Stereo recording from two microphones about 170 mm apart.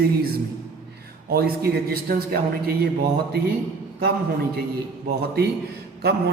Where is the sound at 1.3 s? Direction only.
65° right (ahead or behind).